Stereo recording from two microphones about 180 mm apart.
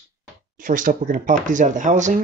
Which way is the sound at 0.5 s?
45° right (ahead or behind).